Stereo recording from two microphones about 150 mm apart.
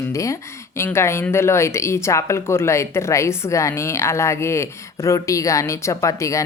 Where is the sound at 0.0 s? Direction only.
20° left (ahead or behind).